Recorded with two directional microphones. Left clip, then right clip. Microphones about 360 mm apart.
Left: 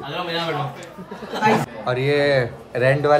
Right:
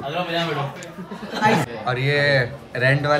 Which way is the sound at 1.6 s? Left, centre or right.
Centre.